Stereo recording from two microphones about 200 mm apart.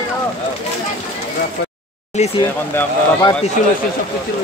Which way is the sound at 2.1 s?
35° left (ahead or behind).